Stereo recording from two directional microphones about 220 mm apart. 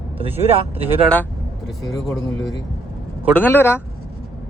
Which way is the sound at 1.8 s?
15° left (ahead or behind).